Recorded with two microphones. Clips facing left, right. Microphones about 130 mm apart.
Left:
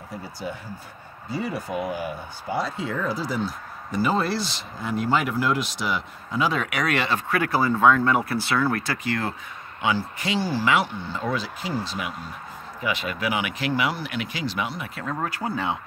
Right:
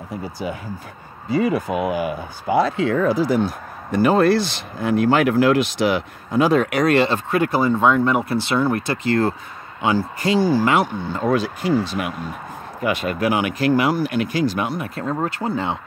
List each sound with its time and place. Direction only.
1.3 s speech: 90° right; by 15.0 s 50° right (ahead or behind)
15.0 s speech: 25° right (ahead or behind)